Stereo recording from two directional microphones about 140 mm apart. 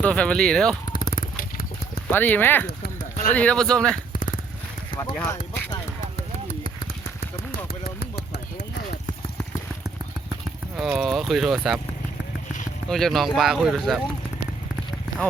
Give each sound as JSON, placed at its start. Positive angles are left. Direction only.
{"t": 0.0, "sound": "speech", "side_deg": 10}
{"t": 0.9, "sound": "a sound", "side_deg": 75}
{"t": 2.0, "sound": "speech", "side_deg": 15}
{"t": 4.1, "sound": "a sound", "side_deg": 85}
{"t": 4.9, "sound": "speech", "side_deg": 15}
{"t": 10.8, "sound": "speech", "side_deg": 0}
{"t": 12.9, "sound": "speech", "side_deg": 0}